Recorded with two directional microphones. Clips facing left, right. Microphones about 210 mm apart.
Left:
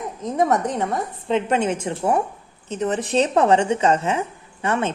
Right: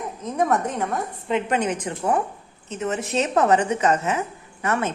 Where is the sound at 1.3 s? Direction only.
25° left (ahead or behind).